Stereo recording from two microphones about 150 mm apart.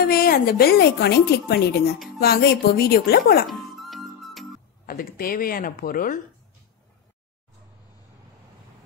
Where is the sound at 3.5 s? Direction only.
Centre (ahead or behind).